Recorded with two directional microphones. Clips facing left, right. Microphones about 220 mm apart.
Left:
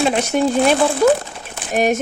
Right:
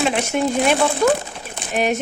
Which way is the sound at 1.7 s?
45° left (ahead or behind).